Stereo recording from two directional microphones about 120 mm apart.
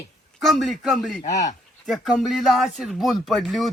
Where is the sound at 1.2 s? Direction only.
70° left (ahead or behind).